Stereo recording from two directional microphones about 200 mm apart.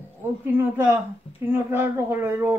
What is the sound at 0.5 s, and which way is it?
Speech, 10° right (ahead or behind).